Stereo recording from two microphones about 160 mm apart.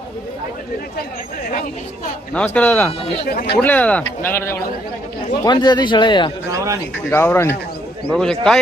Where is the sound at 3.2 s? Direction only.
80° left.